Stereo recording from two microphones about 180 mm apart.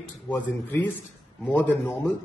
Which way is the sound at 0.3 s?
10° left (ahead or behind).